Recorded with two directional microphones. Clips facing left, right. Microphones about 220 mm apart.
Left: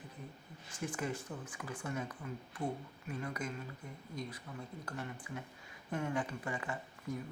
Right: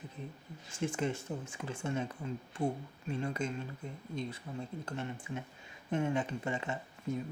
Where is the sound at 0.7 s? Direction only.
25° right (ahead or behind).